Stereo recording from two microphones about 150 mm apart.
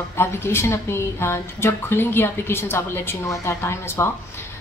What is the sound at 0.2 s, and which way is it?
Speech, 15° left (ahead or behind).